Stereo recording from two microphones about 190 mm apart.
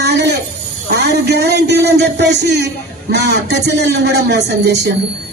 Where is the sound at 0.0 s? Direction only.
60° right (ahead or behind).